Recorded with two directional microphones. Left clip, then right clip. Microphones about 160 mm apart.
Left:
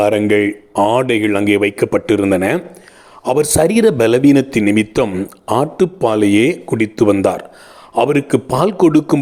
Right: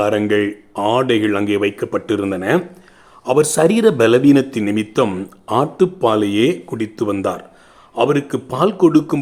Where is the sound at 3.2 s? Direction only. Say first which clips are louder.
Even; 25° left (ahead or behind).